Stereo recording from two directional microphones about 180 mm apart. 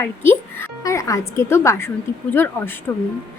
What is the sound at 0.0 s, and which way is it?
A woman's voice, 10° left (ahead or behind).